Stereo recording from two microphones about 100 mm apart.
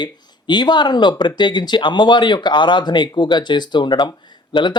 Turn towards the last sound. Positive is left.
turn(degrees=45)  # may be behind; listen again after turning